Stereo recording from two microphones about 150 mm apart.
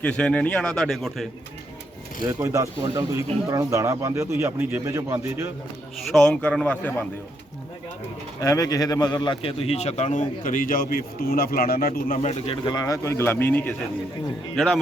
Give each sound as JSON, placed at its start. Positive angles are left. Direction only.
{"t": 0.0, "sound": "a man's voice", "side_deg": 5}
{"t": 2.2, "sound": "speech", "side_deg": -20}
{"t": 6.1, "sound": "a man's voice", "side_deg": 5}
{"t": 8.4, "sound": "a man's voice", "side_deg": 25}
{"t": 12.6, "sound": "a man's voice", "side_deg": 25}
{"t": 14.5, "sound": "a man's voice", "side_deg": 0}